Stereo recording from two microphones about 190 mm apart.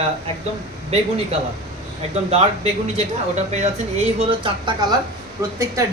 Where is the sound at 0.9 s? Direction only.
35° right (ahead or behind).